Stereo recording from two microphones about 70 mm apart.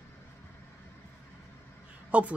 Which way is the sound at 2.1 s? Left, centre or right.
Centre.